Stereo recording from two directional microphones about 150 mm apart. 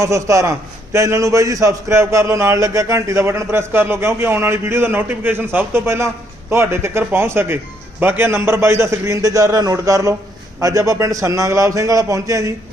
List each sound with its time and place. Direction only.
0.0 s a man's voice: 20° right (ahead or behind)